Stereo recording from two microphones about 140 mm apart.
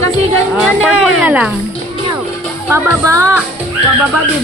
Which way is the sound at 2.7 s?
20° right (ahead or behind).